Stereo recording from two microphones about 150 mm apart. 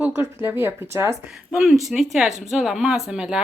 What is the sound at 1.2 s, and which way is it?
Speech, 5° right (ahead or behind).